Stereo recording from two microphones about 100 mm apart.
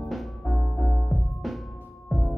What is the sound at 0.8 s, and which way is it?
Music, 25° left (ahead or behind).